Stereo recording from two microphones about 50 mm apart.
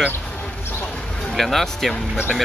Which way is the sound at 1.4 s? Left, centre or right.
Centre.